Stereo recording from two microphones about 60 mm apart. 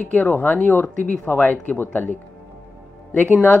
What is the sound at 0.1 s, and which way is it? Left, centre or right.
Speech, left.